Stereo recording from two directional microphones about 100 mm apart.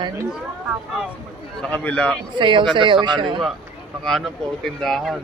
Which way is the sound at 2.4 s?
55° right (ahead or behind).